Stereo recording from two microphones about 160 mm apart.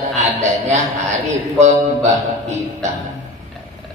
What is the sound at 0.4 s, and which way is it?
Speech, 45° right (ahead or behind).